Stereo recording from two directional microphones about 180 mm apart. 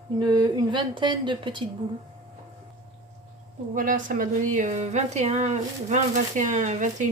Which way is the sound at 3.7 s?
45° right (ahead or behind).